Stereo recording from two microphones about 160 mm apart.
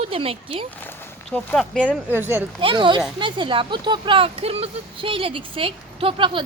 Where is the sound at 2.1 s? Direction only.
15° right (ahead or behind).